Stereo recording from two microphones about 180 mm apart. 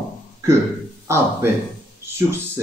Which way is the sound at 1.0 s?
15° right (ahead or behind).